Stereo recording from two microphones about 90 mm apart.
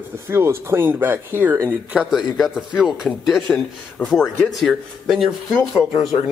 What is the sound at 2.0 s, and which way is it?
Speech, centre (ahead or behind).